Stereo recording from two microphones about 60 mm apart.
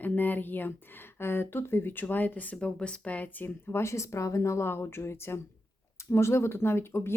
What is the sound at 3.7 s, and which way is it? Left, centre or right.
A woman's voice, left.